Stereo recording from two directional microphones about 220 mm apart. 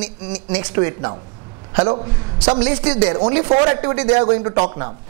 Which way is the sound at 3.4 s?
25° right (ahead or behind).